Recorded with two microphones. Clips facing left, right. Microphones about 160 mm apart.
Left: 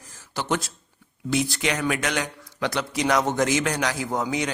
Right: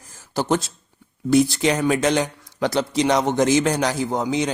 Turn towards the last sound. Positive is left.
turn(degrees=-25)  # may be behind; listen again after turning